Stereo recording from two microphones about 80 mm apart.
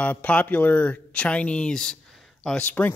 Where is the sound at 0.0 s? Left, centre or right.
Centre.